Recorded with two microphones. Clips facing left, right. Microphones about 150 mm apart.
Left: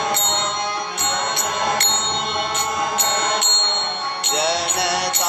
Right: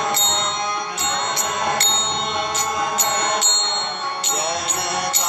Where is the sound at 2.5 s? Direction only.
60° left (ahead or behind).